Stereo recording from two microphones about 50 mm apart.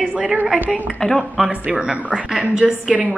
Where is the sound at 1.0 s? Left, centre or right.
Centre.